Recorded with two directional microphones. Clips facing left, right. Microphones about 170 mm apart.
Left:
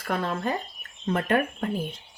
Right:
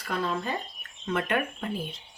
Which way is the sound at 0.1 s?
50° left (ahead or behind).